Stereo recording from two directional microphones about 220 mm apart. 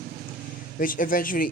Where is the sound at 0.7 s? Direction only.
40° left (ahead or behind).